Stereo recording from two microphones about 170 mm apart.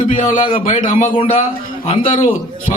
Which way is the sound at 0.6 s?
45° left (ahead or behind).